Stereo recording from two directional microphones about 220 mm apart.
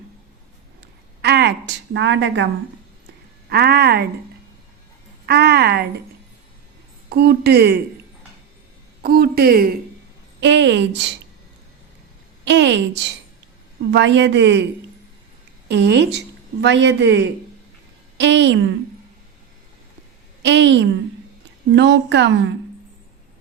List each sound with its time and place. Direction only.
0.8 s a sound: 50° right (ahead or behind)
3.5 s a woman's voice: 45° right (ahead or behind)
5.2 s speech: 50° right (ahead or behind)
7.1 s a woman's voice: 45° right (ahead or behind)
9.0 s a woman's voice: 45° right (ahead or behind)
10.4 s a woman's voice: 55° right (ahead or behind)
12.5 s a woman's voice: 55° right (ahead or behind)
15.7 s a woman's voice: 50° right (ahead or behind)
20.4 s a woman's voice: 55° right (ahead or behind)